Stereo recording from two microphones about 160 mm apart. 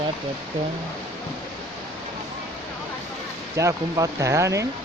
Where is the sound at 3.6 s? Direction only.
20° right (ahead or behind).